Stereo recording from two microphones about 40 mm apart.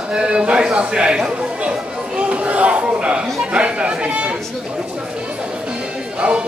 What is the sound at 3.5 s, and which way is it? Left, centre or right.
Speech, right.